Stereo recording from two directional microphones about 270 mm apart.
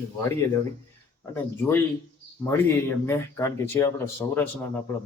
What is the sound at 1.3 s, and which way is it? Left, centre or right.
Speech, centre.